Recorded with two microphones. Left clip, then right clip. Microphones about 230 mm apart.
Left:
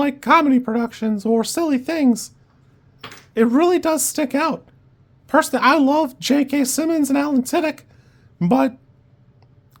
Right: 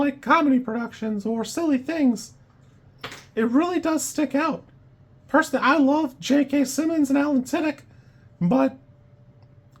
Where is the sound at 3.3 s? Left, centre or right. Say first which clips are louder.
Left 6 dB; left.